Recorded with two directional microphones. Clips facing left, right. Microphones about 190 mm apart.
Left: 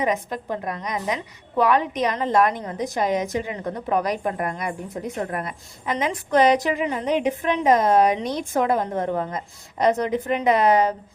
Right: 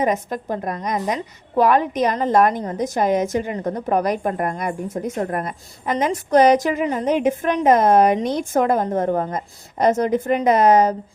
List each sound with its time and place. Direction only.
0.0 s a woman's voice: 45° right (ahead or behind)